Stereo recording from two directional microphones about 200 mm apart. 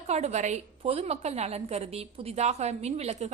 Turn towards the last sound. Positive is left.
turn(degrees=-35)  # may be behind; listen again after turning